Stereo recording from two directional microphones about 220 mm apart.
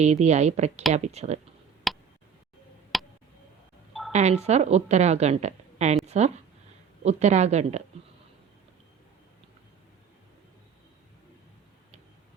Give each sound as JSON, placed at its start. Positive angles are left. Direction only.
{"t": 0.0, "sound": "a woman's voice", "side_deg": -30}
{"t": 1.9, "sound": "tick", "side_deg": 0}
{"t": 4.1, "sound": "a woman's voice", "side_deg": -30}